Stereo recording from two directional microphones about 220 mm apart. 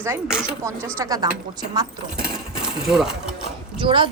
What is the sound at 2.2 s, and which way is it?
Coin, 5° right (ahead or behind).